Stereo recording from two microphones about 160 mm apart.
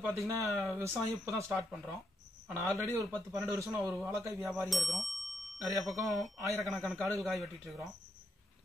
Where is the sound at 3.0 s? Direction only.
20° right (ahead or behind).